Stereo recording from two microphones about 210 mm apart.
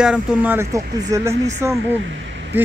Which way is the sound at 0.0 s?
5° right (ahead or behind).